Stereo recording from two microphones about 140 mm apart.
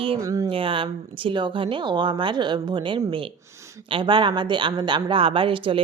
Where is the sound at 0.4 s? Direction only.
40° right (ahead or behind).